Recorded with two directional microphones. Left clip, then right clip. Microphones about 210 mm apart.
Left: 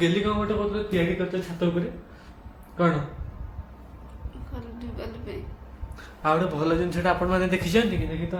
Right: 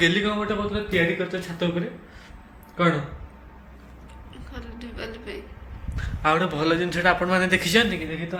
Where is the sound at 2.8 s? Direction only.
25° right (ahead or behind).